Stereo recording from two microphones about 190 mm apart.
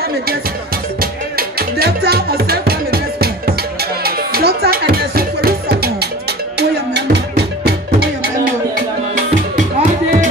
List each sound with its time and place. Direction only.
1.8 s music: 55° right (ahead or behind)